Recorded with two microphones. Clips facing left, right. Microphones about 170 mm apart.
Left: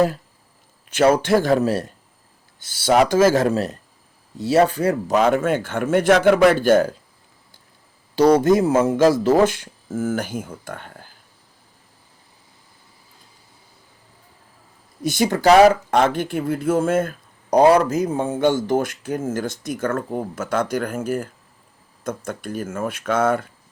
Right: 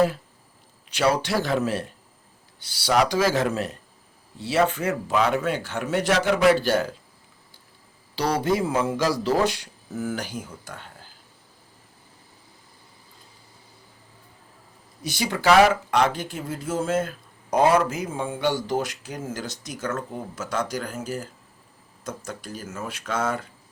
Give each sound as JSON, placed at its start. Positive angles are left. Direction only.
{"t": 0.9, "sound": "speech", "side_deg": 50}
{"t": 8.1, "sound": "speech", "side_deg": 45}
{"t": 15.0, "sound": "speech", "side_deg": 50}